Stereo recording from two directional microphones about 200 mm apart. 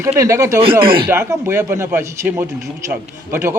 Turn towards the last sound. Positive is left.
turn(degrees=-10)  # may be behind; listen again after turning